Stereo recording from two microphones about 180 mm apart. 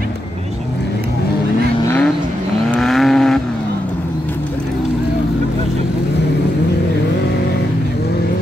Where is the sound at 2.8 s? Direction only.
Centre (ahead or behind).